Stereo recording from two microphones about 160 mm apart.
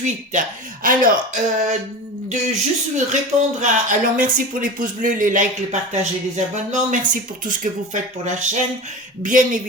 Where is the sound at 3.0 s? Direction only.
50° right (ahead or behind).